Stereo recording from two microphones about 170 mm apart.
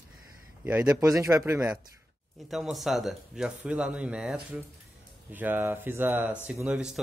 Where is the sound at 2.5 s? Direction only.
Centre (ahead or behind).